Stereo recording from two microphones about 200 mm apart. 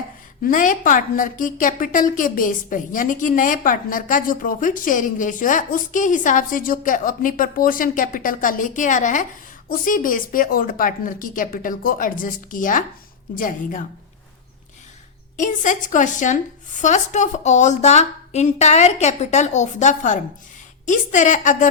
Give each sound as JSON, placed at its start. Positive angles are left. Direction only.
{"t": 0.4, "sound": "a woman's voice", "side_deg": 40}
{"t": 15.4, "sound": "a woman's voice", "side_deg": 40}